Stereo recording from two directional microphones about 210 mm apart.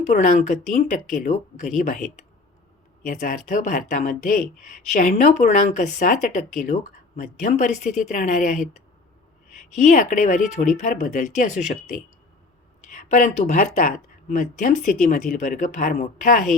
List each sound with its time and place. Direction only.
0.0 s speech: 35° left (ahead or behind)
12.9 s speech: 40° left (ahead or behind)